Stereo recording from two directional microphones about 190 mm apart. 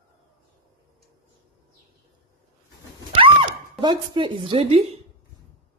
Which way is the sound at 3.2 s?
25° right (ahead or behind).